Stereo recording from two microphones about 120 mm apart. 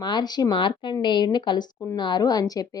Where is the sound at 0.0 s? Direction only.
35° left (ahead or behind).